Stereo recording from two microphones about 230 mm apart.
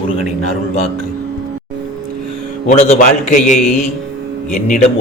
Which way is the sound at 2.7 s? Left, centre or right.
Left.